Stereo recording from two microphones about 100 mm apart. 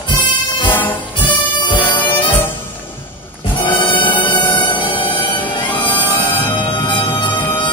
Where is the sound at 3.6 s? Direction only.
55° left (ahead or behind).